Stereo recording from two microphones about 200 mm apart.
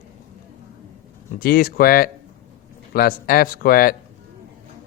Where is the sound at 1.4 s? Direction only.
50° left (ahead or behind).